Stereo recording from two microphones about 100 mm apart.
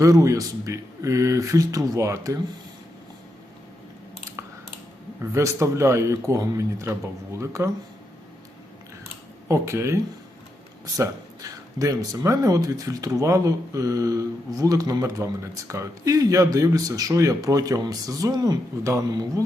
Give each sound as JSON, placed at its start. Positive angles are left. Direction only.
{"t": 0.0, "sound": "speech", "side_deg": -35}
{"t": 5.3, "sound": "speech", "side_deg": -30}
{"t": 9.5, "sound": "speech", "side_deg": -30}